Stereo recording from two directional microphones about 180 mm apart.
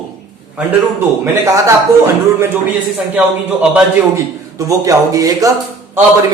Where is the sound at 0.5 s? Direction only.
15° right (ahead or behind).